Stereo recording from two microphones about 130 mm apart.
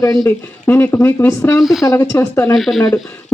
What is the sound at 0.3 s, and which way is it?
Speech, 15° left (ahead or behind).